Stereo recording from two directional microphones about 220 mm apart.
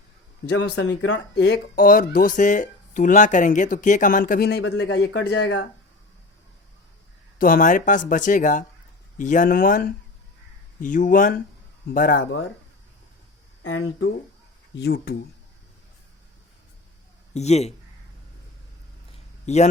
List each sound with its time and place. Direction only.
0.5 s speech: 50° left (ahead or behind)
1.7 s speech: 40° left (ahead or behind)
7.3 s speech: 40° left (ahead or behind)
13.6 s speech: 60° left (ahead or behind)
14.8 s speech: 45° left (ahead or behind)
17.3 s speech: 30° left (ahead or behind)
19.1 s a sound: 30° left (ahead or behind)